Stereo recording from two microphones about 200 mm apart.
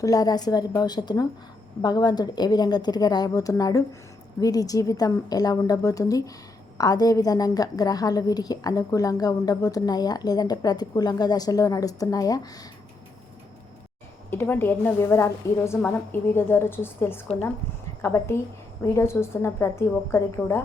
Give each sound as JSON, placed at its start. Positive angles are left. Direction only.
{"t": 0.0, "sound": "a woman's voice", "side_deg": 20}
{"t": 14.3, "sound": "a woman's voice", "side_deg": 10}